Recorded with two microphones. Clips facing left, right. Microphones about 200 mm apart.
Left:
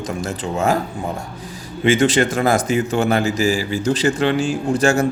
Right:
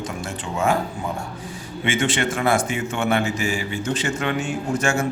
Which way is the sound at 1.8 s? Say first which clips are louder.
Left 7 dB; 40° left (ahead or behind).